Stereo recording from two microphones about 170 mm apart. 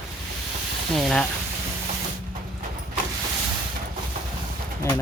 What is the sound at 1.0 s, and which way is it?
Speech, centre (ahead or behind).